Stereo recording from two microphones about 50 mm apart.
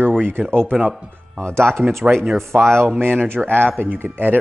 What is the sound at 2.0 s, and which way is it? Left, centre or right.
Speech, centre.